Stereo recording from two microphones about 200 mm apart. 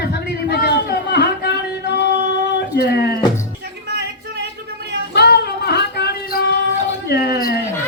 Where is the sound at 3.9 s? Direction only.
55° right (ahead or behind).